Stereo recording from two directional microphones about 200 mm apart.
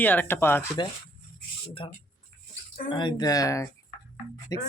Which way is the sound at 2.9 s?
25° left (ahead or behind).